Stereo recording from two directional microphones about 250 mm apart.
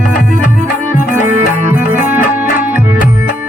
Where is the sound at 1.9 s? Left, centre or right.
Centre.